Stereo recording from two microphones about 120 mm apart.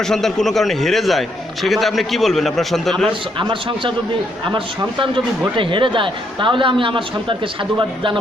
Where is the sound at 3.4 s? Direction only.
45° right (ahead or behind).